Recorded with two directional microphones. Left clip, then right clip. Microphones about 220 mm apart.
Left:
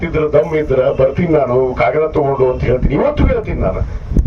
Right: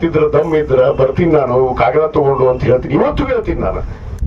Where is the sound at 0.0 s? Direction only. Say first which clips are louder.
Right 1 dB; 50° right (ahead or behind).